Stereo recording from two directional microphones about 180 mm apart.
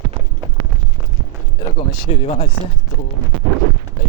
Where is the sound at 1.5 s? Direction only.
30° left (ahead or behind).